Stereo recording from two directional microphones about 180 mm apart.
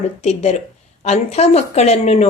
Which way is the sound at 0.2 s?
40° left (ahead or behind).